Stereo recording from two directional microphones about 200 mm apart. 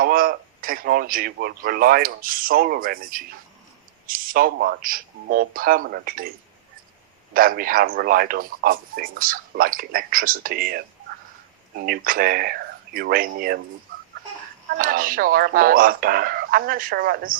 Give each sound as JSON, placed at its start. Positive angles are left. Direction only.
{"t": 0.0, "sound": "a man's voice", "side_deg": -45}
{"t": 7.3, "sound": "a man's voice", "side_deg": -45}
{"t": 13.9, "sound": "fowl", "side_deg": -45}
{"t": 14.8, "sound": "a man's voice", "side_deg": -45}